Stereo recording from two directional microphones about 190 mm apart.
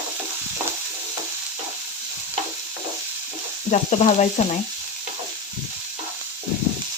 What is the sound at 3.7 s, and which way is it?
Frying, 35° left (ahead or behind).